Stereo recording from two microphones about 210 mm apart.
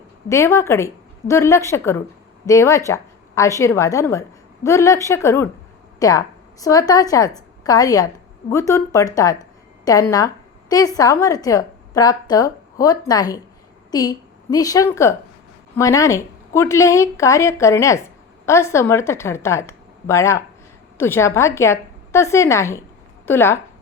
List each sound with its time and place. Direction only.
0.3 s a woman's voice: 15° left (ahead or behind)